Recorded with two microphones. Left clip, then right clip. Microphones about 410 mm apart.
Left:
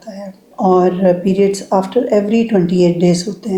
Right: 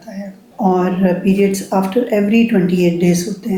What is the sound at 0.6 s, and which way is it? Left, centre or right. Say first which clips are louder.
Speech: left 4 dB; left.